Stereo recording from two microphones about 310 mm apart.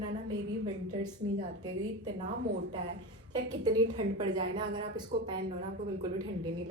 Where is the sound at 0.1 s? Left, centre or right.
Right.